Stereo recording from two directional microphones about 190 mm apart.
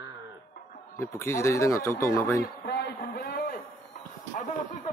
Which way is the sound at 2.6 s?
60° left (ahead or behind).